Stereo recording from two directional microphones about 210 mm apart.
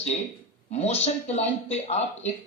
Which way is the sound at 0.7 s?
30° left (ahead or behind).